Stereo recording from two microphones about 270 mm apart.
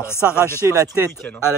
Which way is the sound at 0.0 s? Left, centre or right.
Centre.